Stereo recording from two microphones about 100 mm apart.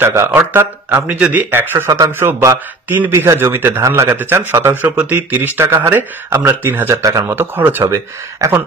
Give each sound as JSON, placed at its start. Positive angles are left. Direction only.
{"t": 0.0, "sound": "a man's voice", "side_deg": -25}
{"t": 7.0, "sound": "a man's voice", "side_deg": -35}
{"t": 7.3, "sound": "a man's voice", "side_deg": -20}